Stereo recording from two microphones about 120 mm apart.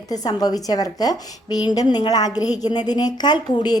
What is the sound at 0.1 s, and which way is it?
A woman's voice, 30° left (ahead or behind).